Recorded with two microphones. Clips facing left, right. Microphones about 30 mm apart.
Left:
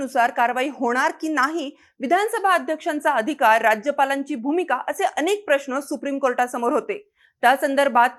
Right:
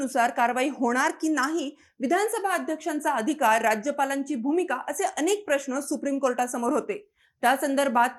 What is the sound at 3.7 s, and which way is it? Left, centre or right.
A woman's voice, left.